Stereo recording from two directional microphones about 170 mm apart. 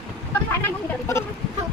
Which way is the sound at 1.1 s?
15° left (ahead or behind).